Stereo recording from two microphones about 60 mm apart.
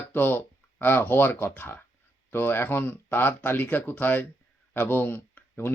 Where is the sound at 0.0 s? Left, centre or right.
Left.